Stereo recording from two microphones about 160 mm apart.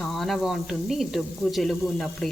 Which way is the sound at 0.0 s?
Centre (ahead or behind).